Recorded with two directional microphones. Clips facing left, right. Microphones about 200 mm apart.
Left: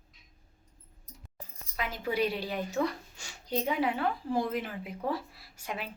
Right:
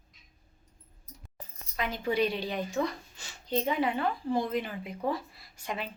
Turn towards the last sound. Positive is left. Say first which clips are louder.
# right 2 dB
turn(degrees=5)  # may be behind; listen again after turning